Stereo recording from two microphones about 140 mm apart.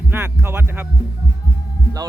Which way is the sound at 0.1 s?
15° right (ahead or behind).